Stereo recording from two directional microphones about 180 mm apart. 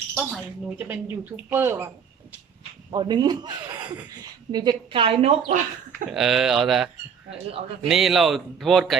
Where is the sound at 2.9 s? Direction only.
25° right (ahead or behind).